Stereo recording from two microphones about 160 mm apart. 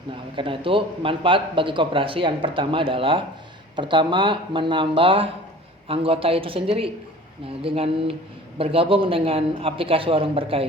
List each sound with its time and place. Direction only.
0.3 s speech: 35° right (ahead or behind)